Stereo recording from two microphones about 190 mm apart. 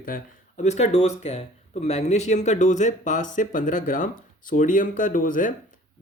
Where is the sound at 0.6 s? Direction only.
35° left (ahead or behind).